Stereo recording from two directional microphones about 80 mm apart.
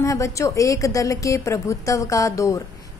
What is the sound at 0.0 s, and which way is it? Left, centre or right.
A woman's voice, left.